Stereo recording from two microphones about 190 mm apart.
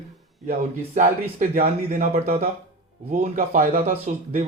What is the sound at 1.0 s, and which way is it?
Speech, 45° right (ahead or behind).